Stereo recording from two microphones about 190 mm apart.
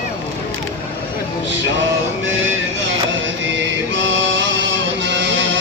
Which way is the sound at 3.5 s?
75° right (ahead or behind).